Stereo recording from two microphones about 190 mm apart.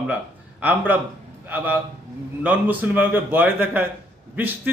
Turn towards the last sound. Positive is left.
turn(degrees=-10)  # may be behind; listen again after turning